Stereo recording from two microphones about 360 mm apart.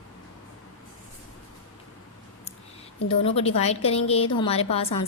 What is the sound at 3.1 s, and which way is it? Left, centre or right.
Speech, centre.